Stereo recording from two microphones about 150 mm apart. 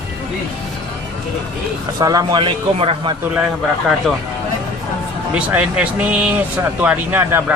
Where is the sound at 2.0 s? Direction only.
25° right (ahead or behind).